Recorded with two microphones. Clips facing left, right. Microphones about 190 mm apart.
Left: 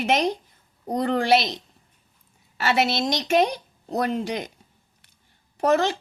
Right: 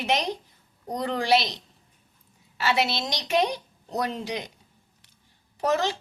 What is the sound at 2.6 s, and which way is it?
A woman's voice, 50° left (ahead or behind).